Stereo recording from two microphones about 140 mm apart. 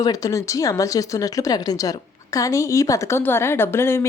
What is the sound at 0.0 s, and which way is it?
Speech, 25° left (ahead or behind).